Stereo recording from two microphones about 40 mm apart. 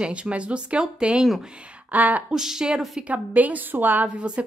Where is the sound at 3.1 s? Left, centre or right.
Right.